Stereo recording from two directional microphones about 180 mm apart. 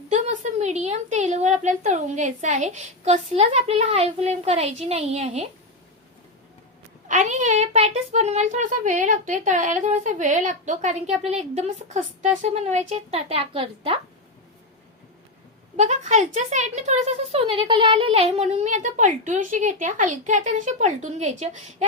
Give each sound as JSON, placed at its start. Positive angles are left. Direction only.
{"t": 0.1, "sound": "speech", "side_deg": -40}
{"t": 7.1, "sound": "speech", "side_deg": -45}
{"t": 15.7, "sound": "speech", "side_deg": -40}